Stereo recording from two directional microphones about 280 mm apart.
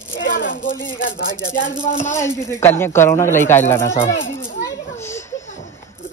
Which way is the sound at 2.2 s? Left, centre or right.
Centre.